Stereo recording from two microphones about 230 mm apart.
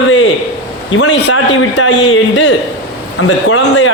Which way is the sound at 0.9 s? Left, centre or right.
Left.